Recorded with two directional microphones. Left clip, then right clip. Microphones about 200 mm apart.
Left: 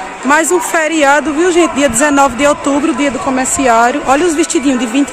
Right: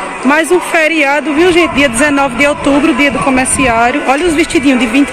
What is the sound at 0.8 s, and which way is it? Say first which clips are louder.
Speech: even; 15° left (ahead or behind).